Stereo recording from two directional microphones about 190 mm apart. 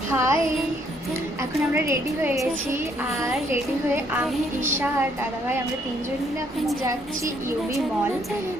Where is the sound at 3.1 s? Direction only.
Centre (ahead or behind).